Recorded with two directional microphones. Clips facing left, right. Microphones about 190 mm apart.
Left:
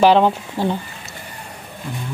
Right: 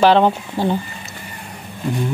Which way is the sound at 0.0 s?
5° left (ahead or behind).